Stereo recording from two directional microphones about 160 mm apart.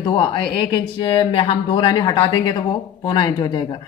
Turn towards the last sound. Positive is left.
turn(degrees=30)  # may be behind; listen again after turning